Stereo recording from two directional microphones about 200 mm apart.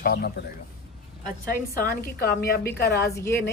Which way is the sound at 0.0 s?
50° left (ahead or behind).